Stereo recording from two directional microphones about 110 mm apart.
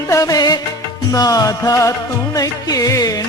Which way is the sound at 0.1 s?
30° left (ahead or behind).